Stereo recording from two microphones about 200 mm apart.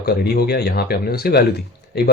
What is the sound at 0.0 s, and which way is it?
Speech, 50° left (ahead or behind).